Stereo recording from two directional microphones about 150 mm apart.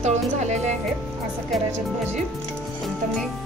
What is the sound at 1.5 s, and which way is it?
Speech, centre (ahead or behind).